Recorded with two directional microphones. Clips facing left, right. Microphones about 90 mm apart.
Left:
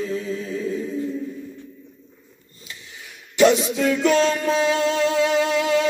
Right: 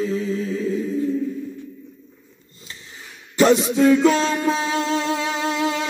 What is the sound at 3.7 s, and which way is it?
Music, 30° right (ahead or behind).